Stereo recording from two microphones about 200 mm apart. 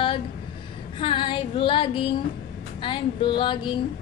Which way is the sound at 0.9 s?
25° left (ahead or behind).